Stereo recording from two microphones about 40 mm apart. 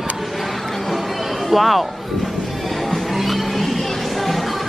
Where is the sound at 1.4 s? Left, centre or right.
Centre.